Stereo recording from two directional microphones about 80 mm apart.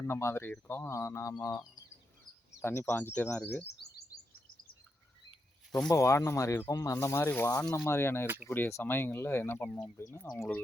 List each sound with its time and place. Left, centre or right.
0.0 s speech: left
2.6 s speech: left
2.9 s speech: left
5.9 s speech: left
9.7 s speech: left